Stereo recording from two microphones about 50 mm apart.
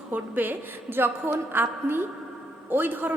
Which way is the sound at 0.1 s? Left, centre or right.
Right.